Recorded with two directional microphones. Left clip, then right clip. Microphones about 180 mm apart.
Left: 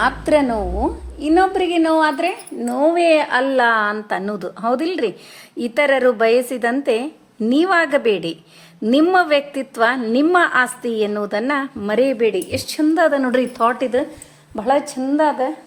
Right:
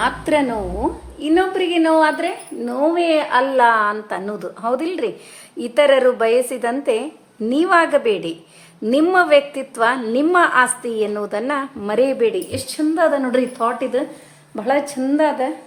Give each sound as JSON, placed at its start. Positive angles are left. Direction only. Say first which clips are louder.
{"t": 0.0, "sound": "a woman's voice", "louder": "left 2 dB", "side_deg": 30}
{"t": 12.5, "sound": "a woman's voice", "louder": "left 3 dB", "side_deg": 40}
{"t": 14.5, "sound": "speech", "louder": "left 1 dB", "side_deg": 20}